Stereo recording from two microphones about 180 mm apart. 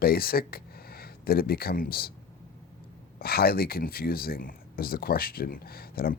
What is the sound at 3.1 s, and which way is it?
Speech, 60° left (ahead or behind).